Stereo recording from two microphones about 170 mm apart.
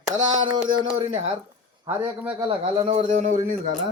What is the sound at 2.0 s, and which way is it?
A man's voice, 30° right (ahead or behind).